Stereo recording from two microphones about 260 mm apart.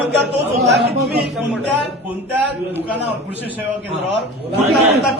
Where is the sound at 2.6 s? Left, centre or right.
Centre.